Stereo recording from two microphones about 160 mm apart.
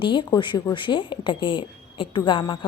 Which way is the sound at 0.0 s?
30° left (ahead or behind).